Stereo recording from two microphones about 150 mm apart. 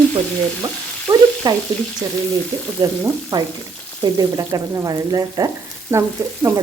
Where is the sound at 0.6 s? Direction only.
25° right (ahead or behind).